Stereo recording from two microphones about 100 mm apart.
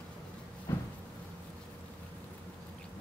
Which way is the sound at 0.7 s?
30° left (ahead or behind).